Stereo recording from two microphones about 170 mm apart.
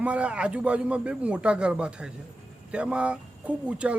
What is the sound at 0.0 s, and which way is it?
Speech, 5° right (ahead or behind).